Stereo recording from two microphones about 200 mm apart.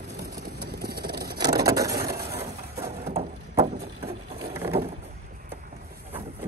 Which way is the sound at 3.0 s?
30° right (ahead or behind).